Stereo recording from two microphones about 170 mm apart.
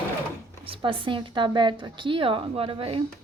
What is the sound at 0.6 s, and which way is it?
A woman's voice, 30° right (ahead or behind).